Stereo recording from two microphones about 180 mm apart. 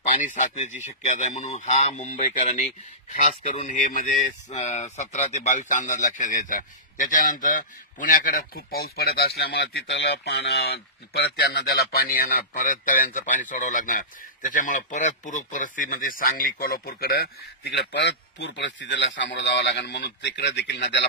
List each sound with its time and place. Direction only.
0.1 s speech: 45° left (ahead or behind); by 21.0 s 75° left (ahead or behind)